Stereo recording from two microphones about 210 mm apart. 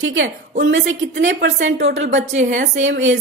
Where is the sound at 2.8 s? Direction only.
65° right (ahead or behind).